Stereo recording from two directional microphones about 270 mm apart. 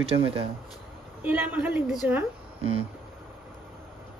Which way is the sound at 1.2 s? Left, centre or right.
Centre.